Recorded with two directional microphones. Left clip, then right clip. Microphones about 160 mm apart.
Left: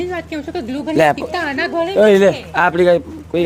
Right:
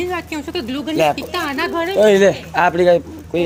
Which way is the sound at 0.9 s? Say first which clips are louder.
Left 3 dB; 80° left.